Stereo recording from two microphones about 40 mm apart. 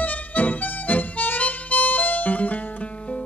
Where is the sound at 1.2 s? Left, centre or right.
Left.